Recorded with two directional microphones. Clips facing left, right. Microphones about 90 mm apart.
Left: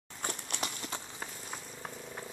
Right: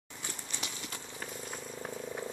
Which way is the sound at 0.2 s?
60° left (ahead or behind).